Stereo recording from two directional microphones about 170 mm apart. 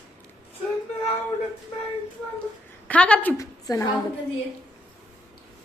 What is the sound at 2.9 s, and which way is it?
Speech, 5° left (ahead or behind).